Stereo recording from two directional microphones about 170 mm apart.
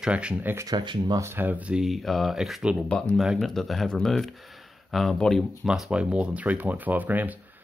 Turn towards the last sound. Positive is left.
turn(degrees=-10)  # may be behind; listen again after turning